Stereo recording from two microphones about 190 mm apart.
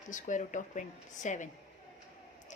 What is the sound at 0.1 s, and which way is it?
Speech, 40° left (ahead or behind).